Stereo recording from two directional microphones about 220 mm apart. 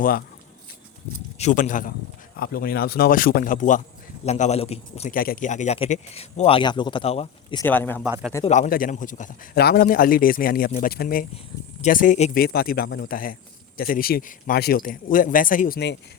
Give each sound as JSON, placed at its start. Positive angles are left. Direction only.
{"t": 1.4, "sound": "a man's voice", "side_deg": 35}
{"t": 7.6, "sound": "speech", "side_deg": 10}
{"t": 8.0, "sound": "a man's voice", "side_deg": -5}
{"t": 8.4, "sound": "speech", "side_deg": 35}